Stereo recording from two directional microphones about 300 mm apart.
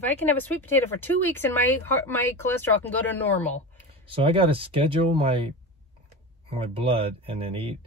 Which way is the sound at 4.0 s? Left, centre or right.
Centre.